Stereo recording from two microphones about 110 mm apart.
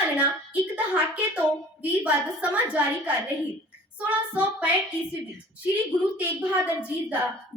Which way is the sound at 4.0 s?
15° right (ahead or behind).